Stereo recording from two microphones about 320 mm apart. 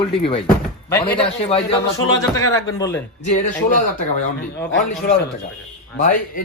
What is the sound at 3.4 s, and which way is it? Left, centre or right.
A man's voice, left.